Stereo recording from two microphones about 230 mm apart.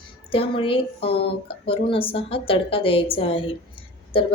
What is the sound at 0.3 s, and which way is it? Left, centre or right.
A woman's voice, left.